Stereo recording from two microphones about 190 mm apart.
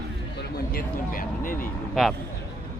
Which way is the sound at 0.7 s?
45° left (ahead or behind).